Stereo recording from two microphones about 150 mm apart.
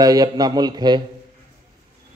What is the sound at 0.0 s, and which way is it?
A man's voice, 25° right (ahead or behind).